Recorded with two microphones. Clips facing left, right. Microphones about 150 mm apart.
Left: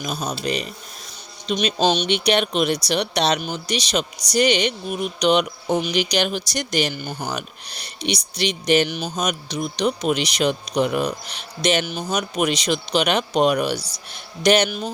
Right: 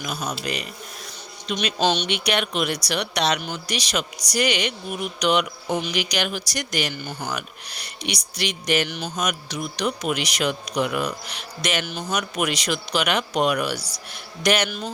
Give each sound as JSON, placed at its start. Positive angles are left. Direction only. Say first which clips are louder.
{"t": 0.0, "sound": "speech", "louder": "left 3 dB", "side_deg": 25}
{"t": 2.1, "sound": "speech", "louder": "left 4 dB", "side_deg": 30}